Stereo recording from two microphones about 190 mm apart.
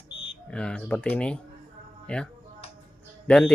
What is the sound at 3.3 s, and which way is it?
Speech, 5° left (ahead or behind).